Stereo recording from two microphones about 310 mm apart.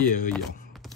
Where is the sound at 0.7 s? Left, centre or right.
Centre.